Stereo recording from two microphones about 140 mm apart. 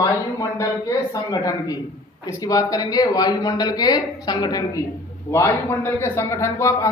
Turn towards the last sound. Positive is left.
turn(degrees=20)  # may be behind; listen again after turning